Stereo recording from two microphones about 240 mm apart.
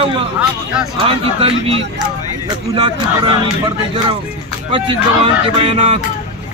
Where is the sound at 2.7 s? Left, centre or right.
Centre.